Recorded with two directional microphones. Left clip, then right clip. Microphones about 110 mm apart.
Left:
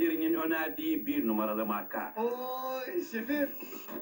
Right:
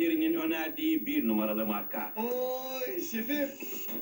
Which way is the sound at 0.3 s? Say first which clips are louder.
Even; 20° right (ahead or behind).